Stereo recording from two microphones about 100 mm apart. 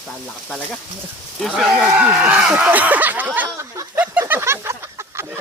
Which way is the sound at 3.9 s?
20° right (ahead or behind).